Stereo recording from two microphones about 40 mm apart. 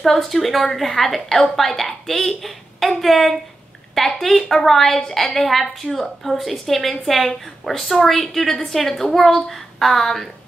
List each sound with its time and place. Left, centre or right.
0.0 s a woman's voice: centre